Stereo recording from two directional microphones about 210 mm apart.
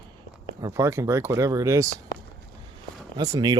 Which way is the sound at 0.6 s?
15° right (ahead or behind).